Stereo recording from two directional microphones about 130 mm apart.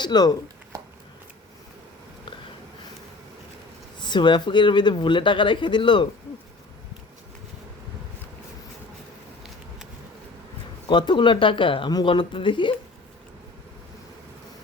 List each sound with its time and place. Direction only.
0.0 s speech: 35° left (ahead or behind)
4.0 s speech: 35° left (ahead or behind)
10.8 s speech: 35° left (ahead or behind)